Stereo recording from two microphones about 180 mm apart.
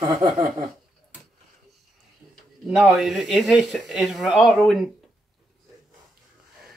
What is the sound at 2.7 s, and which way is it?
Speech, centre (ahead or behind).